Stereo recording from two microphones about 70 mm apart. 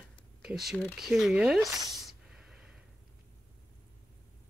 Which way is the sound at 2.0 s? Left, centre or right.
Centre.